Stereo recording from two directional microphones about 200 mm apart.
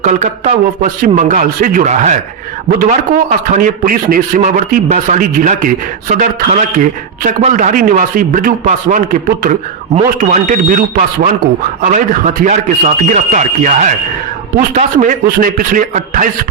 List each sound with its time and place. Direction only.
0.0 s a man's voice: 35° right (ahead or behind)
3.4 s a man's voice: 40° right (ahead or behind)